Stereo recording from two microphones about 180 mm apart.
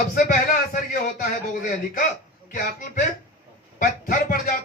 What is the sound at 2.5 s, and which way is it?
A man's voice, 45° left (ahead or behind).